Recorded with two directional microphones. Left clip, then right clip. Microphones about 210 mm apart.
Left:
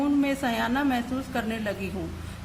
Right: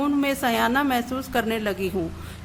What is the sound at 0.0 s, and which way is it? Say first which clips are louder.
A woman's voice: right 3 dB; 50° right (ahead or behind).